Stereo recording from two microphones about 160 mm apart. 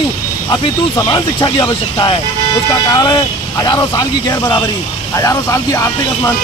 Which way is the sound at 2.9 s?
25° left (ahead or behind).